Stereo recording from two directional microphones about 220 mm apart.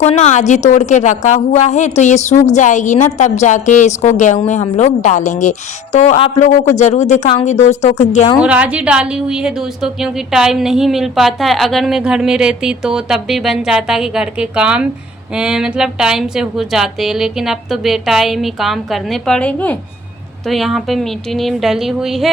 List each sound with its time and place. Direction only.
0.0 s a woman's voice: 30° left (ahead or behind)
8.4 s a woman's voice: 5° right (ahead or behind)